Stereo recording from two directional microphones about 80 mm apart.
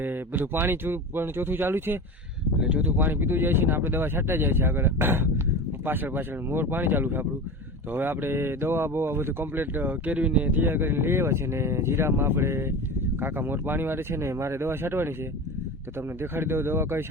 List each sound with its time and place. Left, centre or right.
0.0 s speech: right
2.6 s speech: centre
16.3 s speech: right